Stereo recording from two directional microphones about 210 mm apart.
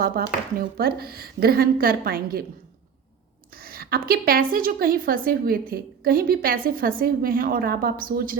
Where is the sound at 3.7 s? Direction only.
45° right (ahead or behind).